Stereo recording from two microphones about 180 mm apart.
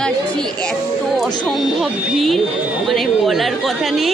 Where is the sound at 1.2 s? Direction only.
Centre (ahead or behind).